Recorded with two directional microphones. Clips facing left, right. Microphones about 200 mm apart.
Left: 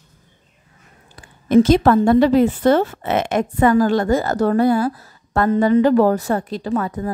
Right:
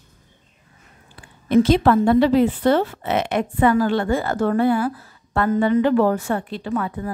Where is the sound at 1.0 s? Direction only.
45° left (ahead or behind).